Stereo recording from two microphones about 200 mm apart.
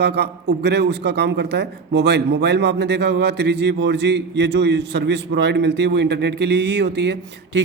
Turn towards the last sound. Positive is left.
turn(degrees=-55)  # may be behind; listen again after turning